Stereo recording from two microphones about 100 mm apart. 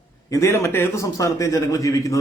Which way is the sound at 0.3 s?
30° left (ahead or behind).